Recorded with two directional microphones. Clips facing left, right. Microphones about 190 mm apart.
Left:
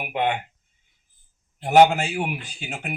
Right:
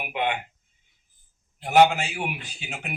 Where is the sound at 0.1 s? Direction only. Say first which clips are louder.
Left 3 dB; 45° left (ahead or behind).